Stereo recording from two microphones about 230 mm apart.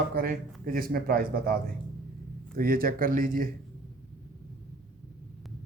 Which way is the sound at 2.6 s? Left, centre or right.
Right.